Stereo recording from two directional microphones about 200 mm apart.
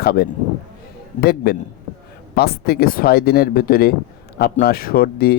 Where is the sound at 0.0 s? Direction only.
50° left (ahead or behind).